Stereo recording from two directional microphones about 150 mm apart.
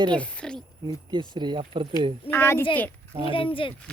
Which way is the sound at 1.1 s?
30° right (ahead or behind).